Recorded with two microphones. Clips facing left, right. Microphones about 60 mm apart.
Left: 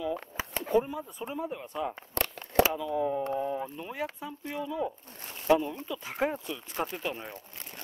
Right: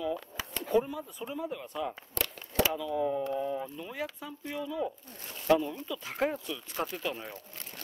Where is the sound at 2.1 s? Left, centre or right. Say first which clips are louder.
Left 8 dB; left.